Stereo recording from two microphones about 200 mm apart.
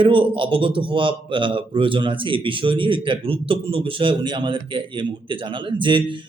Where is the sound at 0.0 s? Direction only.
25° right (ahead or behind).